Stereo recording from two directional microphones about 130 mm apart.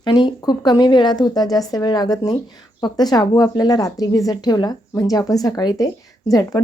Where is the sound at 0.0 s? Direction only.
35° left (ahead or behind).